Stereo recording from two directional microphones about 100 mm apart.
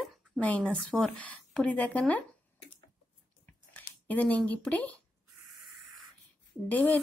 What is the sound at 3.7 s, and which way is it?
Speech, 15° left (ahead or behind).